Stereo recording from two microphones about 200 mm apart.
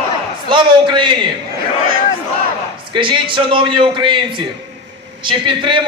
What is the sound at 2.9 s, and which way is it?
A man's voice, 25° right (ahead or behind).